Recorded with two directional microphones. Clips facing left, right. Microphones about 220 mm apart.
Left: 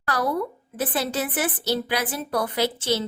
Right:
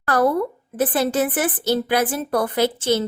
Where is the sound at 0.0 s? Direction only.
50° right (ahead or behind).